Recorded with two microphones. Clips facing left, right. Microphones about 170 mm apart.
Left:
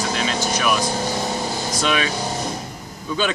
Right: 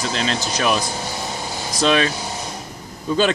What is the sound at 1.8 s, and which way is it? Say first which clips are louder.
Speech: right 5 dB; 35° right (ahead or behind).